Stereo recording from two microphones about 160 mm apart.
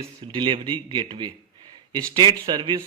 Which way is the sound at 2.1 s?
25° right (ahead or behind).